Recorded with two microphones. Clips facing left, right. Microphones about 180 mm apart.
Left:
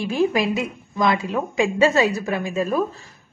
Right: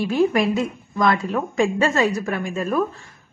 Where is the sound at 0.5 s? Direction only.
20° left (ahead or behind).